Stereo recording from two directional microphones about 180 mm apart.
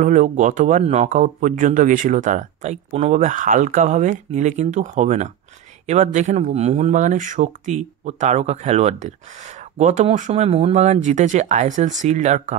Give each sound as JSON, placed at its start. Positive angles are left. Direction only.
{"t": 0.0, "sound": "a man's voice", "side_deg": -45}